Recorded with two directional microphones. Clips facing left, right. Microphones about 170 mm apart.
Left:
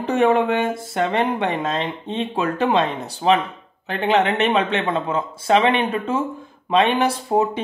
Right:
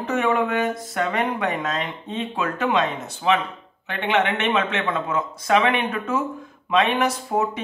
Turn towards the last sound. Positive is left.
turn(degrees=30)  # may be behind; listen again after turning